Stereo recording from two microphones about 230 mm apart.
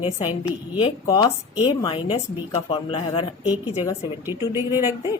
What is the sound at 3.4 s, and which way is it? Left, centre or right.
Speech, centre.